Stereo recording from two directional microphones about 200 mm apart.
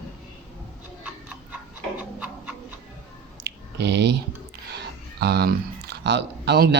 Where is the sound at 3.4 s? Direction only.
60° right (ahead or behind).